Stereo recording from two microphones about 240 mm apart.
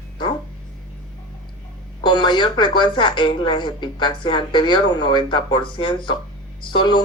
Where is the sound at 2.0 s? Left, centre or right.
Centre.